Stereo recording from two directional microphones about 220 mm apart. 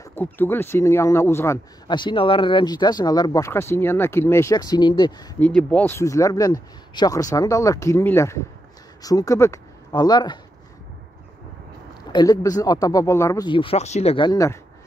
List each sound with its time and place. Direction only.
0.0 s speech: 10° left (ahead or behind)
5.4 s speech: 5° left (ahead or behind)
12.1 s speech: 20° left (ahead or behind)